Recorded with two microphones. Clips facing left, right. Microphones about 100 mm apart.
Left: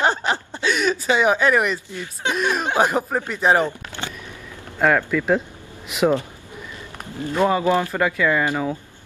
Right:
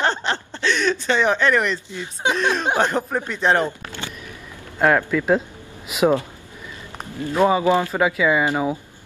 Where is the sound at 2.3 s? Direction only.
10° left (ahead or behind).